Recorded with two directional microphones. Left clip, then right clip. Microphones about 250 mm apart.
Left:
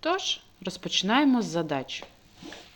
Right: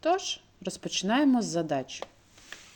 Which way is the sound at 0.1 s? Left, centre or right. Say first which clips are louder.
Left 1 dB; right.